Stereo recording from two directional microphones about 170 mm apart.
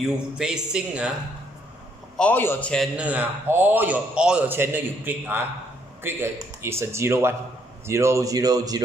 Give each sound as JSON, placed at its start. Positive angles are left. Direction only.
{"t": 0.0, "sound": "speech", "side_deg": -5}
{"t": 2.1, "sound": "a man's voice", "side_deg": 10}
{"t": 3.0, "sound": "a man's voice", "side_deg": -10}